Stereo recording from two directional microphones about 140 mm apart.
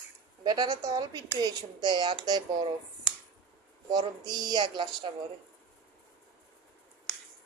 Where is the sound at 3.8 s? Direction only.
30° right (ahead or behind).